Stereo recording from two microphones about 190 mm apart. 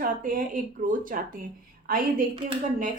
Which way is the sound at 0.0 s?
45° right (ahead or behind).